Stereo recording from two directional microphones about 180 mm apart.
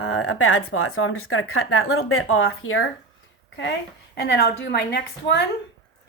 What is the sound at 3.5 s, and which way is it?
A woman's voice, 80° left.